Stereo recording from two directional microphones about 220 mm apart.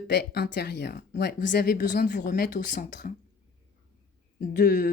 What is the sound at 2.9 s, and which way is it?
Speech, 50° left (ahead or behind).